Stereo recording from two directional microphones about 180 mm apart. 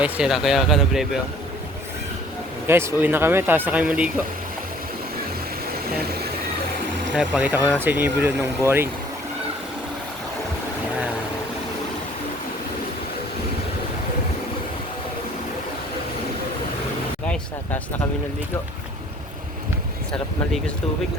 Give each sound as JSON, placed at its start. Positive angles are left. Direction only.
{"t": 0.0, "sound": "speech", "side_deg": -5}
{"t": 2.6, "sound": "speech", "side_deg": -15}
{"t": 7.1, "sound": "speech", "side_deg": -5}
{"t": 17.2, "sound": "speech", "side_deg": 5}